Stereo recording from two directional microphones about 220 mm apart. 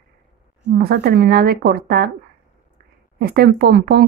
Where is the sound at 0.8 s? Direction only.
45° right (ahead or behind).